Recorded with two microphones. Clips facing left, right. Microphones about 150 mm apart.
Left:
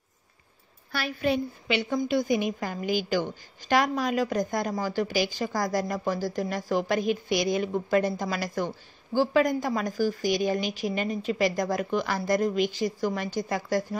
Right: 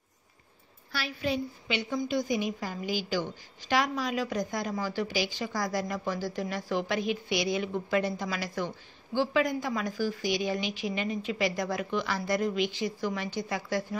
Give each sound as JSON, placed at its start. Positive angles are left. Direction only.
{"t": 0.9, "sound": "a woman's voice", "side_deg": 55}